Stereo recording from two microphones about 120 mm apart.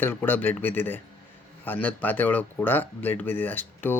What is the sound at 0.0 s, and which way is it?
Speech, 15° left (ahead or behind).